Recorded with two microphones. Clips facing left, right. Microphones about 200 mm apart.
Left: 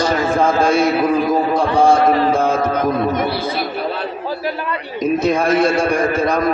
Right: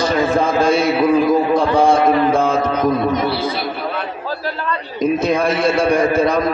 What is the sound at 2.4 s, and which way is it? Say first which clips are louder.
Music: even; 55° left (ahead or behind).